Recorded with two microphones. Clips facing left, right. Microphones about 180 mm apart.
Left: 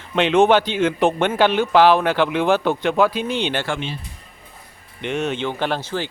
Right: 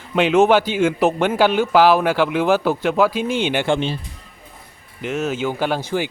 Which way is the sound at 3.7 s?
35° right (ahead or behind).